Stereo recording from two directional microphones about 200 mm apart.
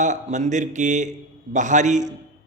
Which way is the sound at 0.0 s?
35° right (ahead or behind).